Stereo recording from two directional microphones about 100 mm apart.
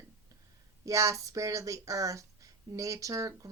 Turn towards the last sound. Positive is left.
turn(degrees=-35)  # may be behind; listen again after turning